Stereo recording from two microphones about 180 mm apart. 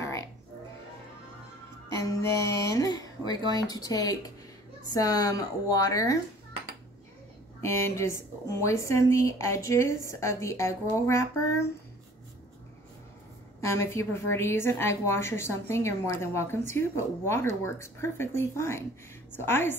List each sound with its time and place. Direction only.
1.9 s speech: 20° left (ahead or behind)
7.6 s a woman's voice: 15° left (ahead or behind)
13.6 s a woman's voice: 15° left (ahead or behind)